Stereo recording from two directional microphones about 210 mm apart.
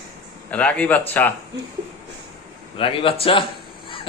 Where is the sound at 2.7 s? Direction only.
25° left (ahead or behind).